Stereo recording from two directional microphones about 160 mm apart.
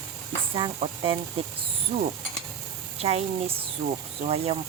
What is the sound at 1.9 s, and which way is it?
Pulleys, 50° right (ahead or behind).